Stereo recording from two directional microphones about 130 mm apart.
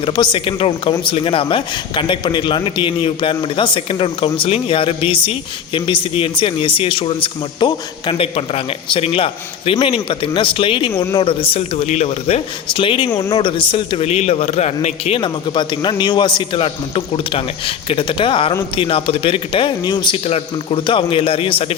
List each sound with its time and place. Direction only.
0.0 s a man's voice: 40° left (ahead or behind)
15.2 s a man's voice: 35° left (ahead or behind)